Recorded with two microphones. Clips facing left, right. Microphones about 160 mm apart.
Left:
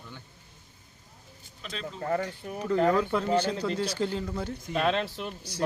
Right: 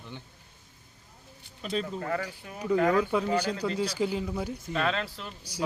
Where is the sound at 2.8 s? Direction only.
10° right (ahead or behind).